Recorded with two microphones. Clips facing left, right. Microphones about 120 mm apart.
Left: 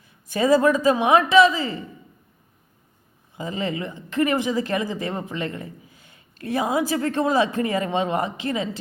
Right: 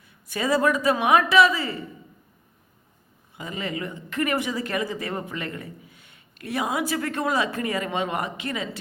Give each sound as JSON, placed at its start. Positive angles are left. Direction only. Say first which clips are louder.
{"t": 0.3, "sound": "a woman's voice", "louder": "left 5 dB", "side_deg": 30}
{"t": 3.3, "sound": "a woman's voice", "louder": "left 4 dB", "side_deg": 30}